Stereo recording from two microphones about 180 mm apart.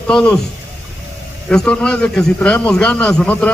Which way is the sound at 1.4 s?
5° left (ahead or behind).